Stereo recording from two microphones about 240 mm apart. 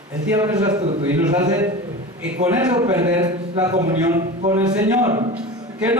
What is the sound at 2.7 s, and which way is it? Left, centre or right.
A man's voice, centre.